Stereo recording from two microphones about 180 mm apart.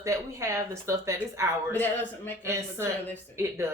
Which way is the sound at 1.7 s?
10° left (ahead or behind).